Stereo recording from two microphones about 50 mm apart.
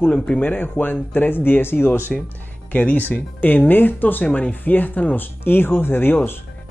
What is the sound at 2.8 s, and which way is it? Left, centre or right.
Speech, left.